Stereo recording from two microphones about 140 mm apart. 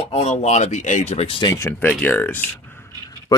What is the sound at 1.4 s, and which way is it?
Speech, 25° left (ahead or behind).